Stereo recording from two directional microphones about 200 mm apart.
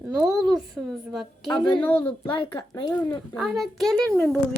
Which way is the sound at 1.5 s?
25° left (ahead or behind).